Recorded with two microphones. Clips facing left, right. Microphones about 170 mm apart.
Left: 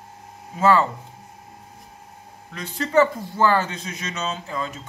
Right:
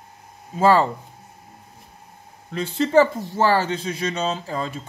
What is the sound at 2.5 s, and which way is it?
Speech, 30° right (ahead or behind).